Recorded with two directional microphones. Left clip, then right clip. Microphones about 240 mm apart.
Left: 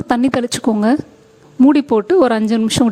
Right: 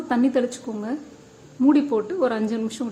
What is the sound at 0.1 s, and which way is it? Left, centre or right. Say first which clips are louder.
Speech: left 6 dB; left.